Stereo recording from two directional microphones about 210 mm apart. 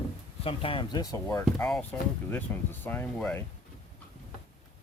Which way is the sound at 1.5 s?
5° left (ahead or behind).